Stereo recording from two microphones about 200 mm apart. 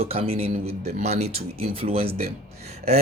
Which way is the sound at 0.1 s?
30° right (ahead or behind).